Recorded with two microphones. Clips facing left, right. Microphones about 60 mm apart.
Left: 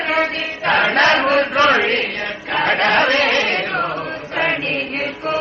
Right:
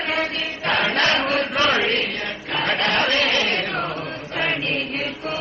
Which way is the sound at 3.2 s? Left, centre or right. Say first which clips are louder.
Left 4 dB; left.